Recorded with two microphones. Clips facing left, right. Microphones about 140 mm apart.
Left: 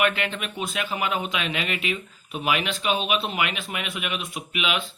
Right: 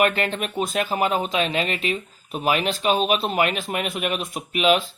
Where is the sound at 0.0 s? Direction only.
40° right (ahead or behind).